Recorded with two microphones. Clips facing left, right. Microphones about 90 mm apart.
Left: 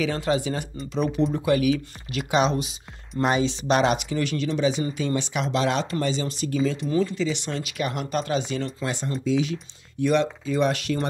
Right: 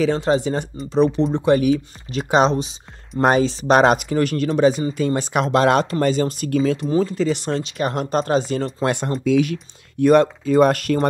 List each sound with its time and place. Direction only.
0.0 s speech: 35° right (ahead or behind)
3.2 s speech: 45° right (ahead or behind)
6.9 s speech: 40° right (ahead or behind)
8.8 s speech: 65° right (ahead or behind)